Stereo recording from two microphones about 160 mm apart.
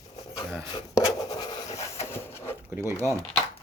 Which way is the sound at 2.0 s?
15° left (ahead or behind).